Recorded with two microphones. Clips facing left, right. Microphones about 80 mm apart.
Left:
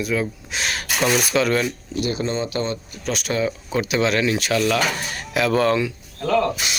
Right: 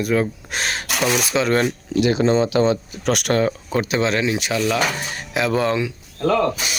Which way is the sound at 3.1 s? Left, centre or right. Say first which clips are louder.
Right 5 dB; right.